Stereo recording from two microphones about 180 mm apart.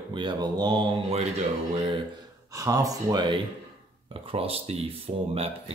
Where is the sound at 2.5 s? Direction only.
20° right (ahead or behind).